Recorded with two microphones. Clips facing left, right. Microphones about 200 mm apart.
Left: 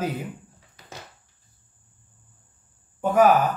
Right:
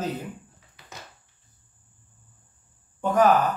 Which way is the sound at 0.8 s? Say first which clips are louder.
Left 4 dB; 40° left (ahead or behind).